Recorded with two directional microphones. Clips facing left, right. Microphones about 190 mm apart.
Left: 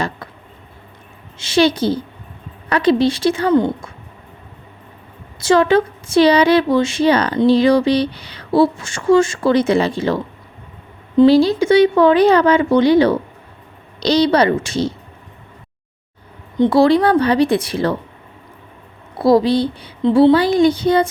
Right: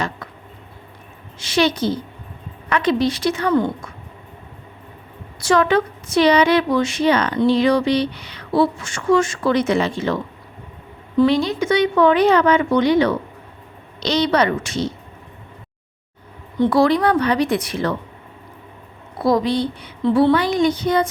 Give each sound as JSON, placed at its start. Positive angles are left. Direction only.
{"t": 1.4, "sound": "a woman's voice", "side_deg": 30}
{"t": 5.4, "sound": "speech", "side_deg": 25}
{"t": 11.3, "sound": "speech", "side_deg": 35}
{"t": 16.6, "sound": "speech", "side_deg": 25}
{"t": 19.2, "sound": "speech", "side_deg": 30}
{"t": 20.0, "sound": "a woman's voice", "side_deg": 20}
{"t": 20.3, "sound": "speech", "side_deg": 30}